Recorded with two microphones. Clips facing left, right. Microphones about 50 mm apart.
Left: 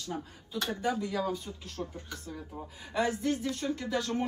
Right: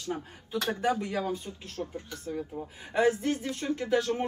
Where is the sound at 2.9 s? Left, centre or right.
Right.